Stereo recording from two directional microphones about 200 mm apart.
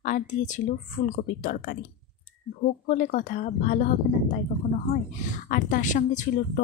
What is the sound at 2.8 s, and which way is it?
Speech, 40° left (ahead or behind).